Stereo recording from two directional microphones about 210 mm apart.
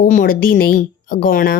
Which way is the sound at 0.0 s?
40° left (ahead or behind).